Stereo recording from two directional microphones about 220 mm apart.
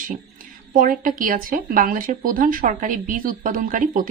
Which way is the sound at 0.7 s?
40° right (ahead or behind).